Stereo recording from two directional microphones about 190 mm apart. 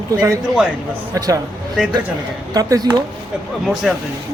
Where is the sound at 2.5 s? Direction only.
20° right (ahead or behind).